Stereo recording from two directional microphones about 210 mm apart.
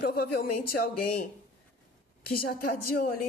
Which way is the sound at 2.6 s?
45° left (ahead or behind).